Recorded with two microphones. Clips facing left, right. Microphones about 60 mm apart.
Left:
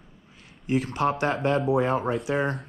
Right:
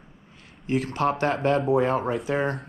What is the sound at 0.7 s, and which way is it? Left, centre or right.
Speech, right.